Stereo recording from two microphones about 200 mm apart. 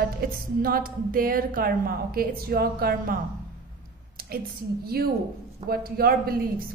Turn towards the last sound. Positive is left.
turn(degrees=-50)  # may be behind; listen again after turning